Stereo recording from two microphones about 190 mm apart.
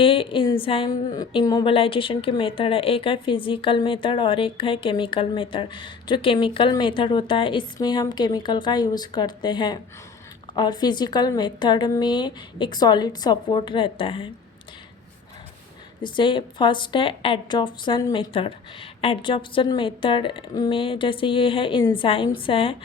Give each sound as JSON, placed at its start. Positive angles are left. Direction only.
{"t": 0.0, "sound": "a woman's voice", "side_deg": 30}
{"t": 16.0, "sound": "a woman's voice", "side_deg": 25}